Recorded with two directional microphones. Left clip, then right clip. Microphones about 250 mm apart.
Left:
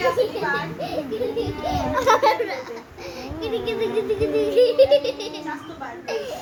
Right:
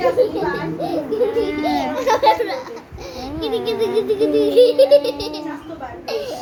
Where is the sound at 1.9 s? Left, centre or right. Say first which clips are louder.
Right 1 dB; centre.